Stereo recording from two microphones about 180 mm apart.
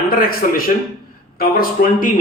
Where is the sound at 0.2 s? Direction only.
55° left (ahead or behind).